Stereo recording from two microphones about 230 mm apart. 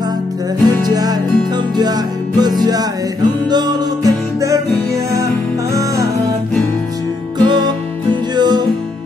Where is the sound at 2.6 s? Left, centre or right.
Centre.